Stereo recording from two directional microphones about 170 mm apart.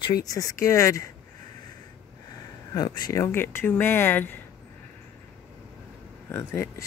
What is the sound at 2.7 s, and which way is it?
Speech, 25° left (ahead or behind).